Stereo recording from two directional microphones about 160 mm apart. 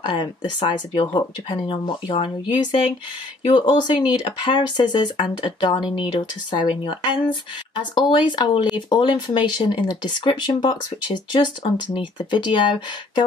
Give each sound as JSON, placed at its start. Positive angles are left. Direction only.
{"t": 0.0, "sound": "speech", "side_deg": 30}